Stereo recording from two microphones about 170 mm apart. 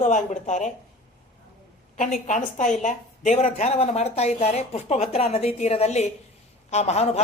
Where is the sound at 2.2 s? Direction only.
45° left (ahead or behind).